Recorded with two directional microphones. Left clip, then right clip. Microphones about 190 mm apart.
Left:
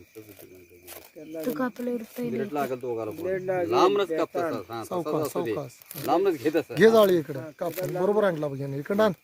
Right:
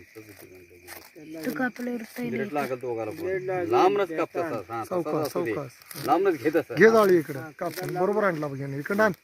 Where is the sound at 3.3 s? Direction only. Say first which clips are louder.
Left 2 dB; 50° left (ahead or behind).